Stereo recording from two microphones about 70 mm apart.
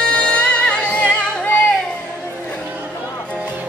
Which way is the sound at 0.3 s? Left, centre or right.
Centre.